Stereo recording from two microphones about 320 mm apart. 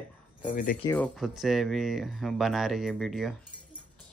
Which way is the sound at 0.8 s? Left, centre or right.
Centre.